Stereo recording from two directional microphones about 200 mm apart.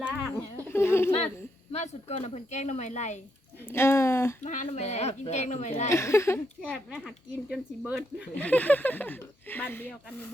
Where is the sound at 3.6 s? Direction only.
10° left (ahead or behind).